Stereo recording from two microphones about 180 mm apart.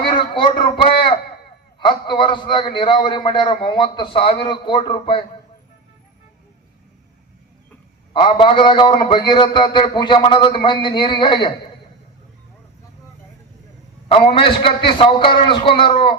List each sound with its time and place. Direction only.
0.0 s a sound: 30° left (ahead or behind)
1.8 s a man's voice: 25° left (ahead or behind)
8.1 s a man's voice: 30° left (ahead or behind)
14.1 s a man's voice: 30° left (ahead or behind)